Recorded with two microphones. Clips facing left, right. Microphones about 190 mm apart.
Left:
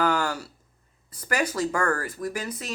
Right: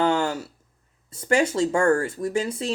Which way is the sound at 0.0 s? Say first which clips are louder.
Right 3 dB; 25° right (ahead or behind).